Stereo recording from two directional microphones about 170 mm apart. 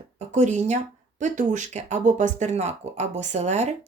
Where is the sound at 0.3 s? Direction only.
45° right (ahead or behind).